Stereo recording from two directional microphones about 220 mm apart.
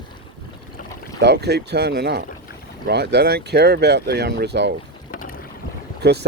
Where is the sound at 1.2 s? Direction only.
50° right (ahead or behind).